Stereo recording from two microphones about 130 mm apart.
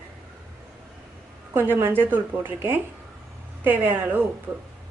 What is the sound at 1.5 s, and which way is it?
Speech, 15° right (ahead or behind).